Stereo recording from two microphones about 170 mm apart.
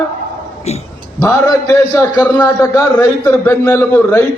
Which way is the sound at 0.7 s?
40° left (ahead or behind).